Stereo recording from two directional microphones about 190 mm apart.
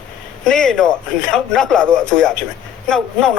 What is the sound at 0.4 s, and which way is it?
Speech, 5° left (ahead or behind).